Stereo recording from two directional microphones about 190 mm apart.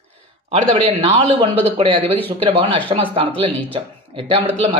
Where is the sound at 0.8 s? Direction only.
25° right (ahead or behind).